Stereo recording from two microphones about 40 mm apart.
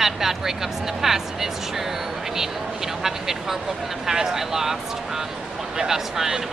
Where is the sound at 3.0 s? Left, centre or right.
Centre.